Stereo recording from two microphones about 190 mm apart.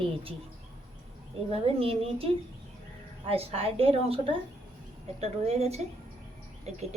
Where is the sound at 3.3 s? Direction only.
30° right (ahead or behind).